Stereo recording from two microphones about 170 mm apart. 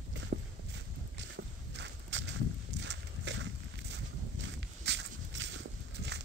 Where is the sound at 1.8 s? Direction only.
90° right.